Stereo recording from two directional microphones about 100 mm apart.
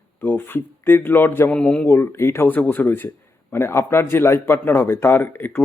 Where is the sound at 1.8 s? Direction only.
25° left (ahead or behind).